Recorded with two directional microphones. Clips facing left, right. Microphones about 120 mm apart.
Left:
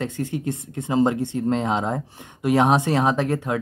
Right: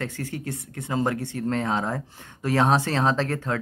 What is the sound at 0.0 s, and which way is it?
Speech, 20° left (ahead or behind).